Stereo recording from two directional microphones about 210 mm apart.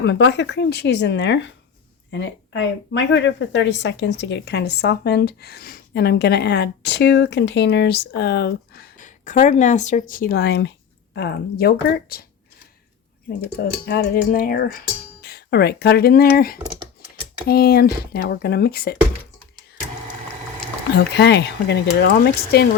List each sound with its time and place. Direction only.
0.0 s a woman's voice: 55° left (ahead or behind)
13.6 s a woman's voice: 50° left (ahead or behind)
20.9 s a woman's voice: 55° left (ahead or behind)